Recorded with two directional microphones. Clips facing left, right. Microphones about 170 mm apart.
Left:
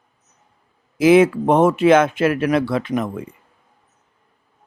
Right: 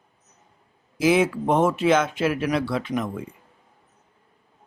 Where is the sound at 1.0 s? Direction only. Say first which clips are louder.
Left 7 dB; 60° left (ahead or behind).